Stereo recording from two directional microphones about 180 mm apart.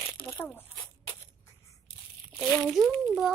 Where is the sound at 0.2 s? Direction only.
30° left (ahead or behind).